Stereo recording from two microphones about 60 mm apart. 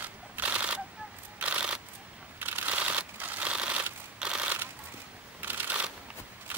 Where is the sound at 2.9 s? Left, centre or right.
Right.